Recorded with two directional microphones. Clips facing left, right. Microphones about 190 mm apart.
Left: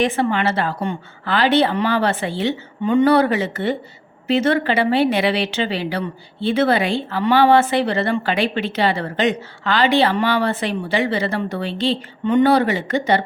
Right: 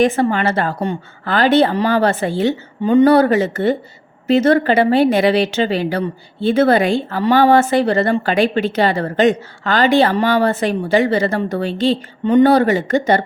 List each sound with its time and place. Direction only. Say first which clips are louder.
0.0 s speech: right 4 dB; 45° right (ahead or behind)